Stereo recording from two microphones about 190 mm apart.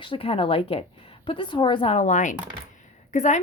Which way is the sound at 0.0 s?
30° left (ahead or behind).